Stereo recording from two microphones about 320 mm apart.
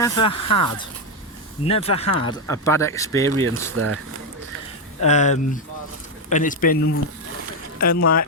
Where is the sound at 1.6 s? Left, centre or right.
Centre.